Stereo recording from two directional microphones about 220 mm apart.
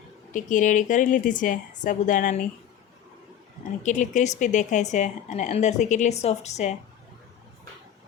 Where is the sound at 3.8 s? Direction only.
35° left (ahead or behind).